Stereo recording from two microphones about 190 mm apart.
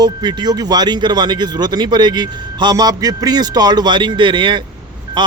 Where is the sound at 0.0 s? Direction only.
25° right (ahead or behind).